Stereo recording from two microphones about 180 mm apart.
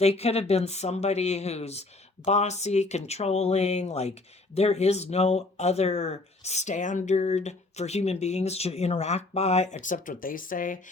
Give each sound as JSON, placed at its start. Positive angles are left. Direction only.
{"t": 0.0, "sound": "speech", "side_deg": 35}
{"t": 9.7, "sound": "speech", "side_deg": 45}